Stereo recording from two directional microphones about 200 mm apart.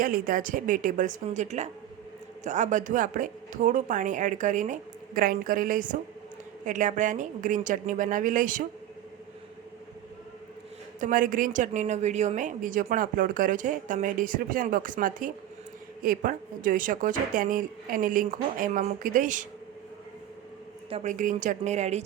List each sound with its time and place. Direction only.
0.0 s a woman's voice: 45° right (ahead or behind)
11.0 s a woman's voice: 45° right (ahead or behind)
20.9 s a woman's voice: 40° right (ahead or behind)